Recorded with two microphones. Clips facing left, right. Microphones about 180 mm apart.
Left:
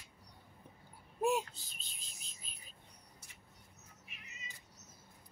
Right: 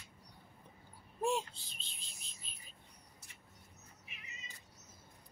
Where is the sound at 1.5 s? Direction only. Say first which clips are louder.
Even; 45° left (ahead or behind).